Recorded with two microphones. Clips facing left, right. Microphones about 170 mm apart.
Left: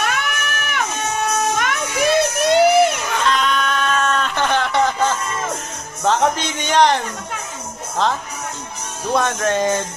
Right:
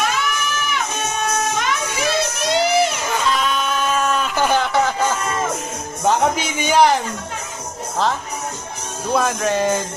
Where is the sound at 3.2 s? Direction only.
5° right (ahead or behind).